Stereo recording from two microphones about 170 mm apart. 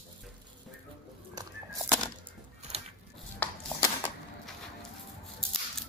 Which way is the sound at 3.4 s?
20° left (ahead or behind).